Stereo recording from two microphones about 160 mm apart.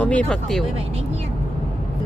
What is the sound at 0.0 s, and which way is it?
Speech, 10° left (ahead or behind).